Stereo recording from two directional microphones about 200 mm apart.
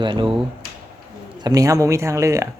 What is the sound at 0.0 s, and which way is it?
Speech, 25° right (ahead or behind).